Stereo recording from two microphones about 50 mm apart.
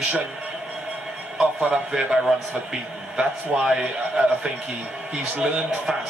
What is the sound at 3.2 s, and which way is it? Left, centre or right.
A man's voice, centre.